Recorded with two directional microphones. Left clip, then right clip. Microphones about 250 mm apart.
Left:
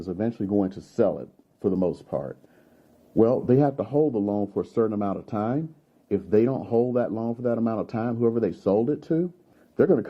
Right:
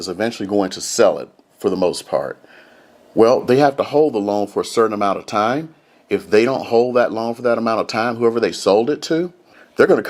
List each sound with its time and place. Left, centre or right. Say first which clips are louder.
0.2 s speech: right 7 dB; centre
4.0 s speech: right 7 dB; right
4.7 s speech: right 10 dB; centre